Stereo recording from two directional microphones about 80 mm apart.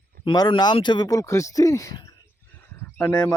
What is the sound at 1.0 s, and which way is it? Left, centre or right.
Speech, left.